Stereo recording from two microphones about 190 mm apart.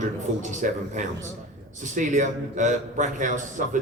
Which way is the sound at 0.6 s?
45° right (ahead or behind).